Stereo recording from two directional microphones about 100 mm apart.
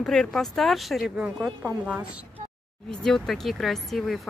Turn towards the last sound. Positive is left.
turn(degrees=0)  # may be behind; listen again after turning